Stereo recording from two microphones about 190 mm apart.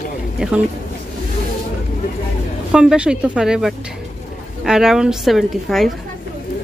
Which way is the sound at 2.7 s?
5° right (ahead or behind).